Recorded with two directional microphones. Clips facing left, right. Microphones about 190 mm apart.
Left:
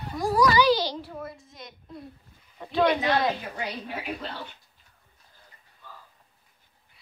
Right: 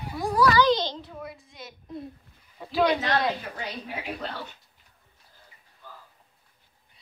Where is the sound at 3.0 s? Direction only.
Centre (ahead or behind).